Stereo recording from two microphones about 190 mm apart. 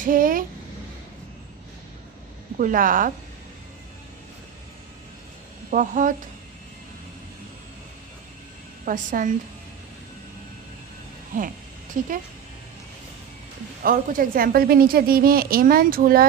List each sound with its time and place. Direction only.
0.0 s speech: 45° right (ahead or behind)
2.6 s a woman's voice: 45° right (ahead or behind)
5.7 s a woman's voice: 45° right (ahead or behind)
8.8 s a woman's voice: 45° right (ahead or behind)
11.3 s a woman's voice: 45° right (ahead or behind)
13.8 s a woman's voice: 50° right (ahead or behind)